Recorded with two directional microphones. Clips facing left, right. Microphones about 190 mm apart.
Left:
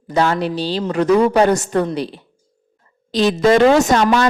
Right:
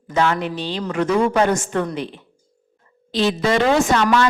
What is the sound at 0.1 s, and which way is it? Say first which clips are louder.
A woman's voice: left 3 dB; 35° left (ahead or behind).